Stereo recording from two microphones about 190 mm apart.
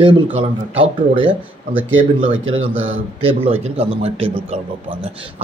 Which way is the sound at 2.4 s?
90° right.